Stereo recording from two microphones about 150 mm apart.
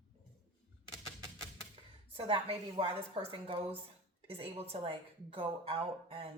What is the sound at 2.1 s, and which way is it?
A woman's voice, 35° right (ahead or behind).